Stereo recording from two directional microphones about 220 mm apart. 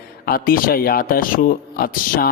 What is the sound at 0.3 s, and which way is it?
Speech, 40° left (ahead or behind).